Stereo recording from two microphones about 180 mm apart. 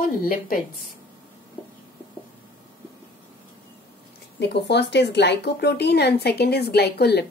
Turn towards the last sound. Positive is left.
turn(degrees=65)  # may be behind; listen again after turning